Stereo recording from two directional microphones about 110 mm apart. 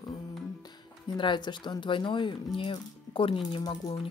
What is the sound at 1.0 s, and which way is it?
Speech, 45° left (ahead or behind).